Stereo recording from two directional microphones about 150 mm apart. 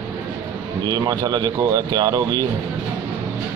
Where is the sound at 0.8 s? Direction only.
30° right (ahead or behind).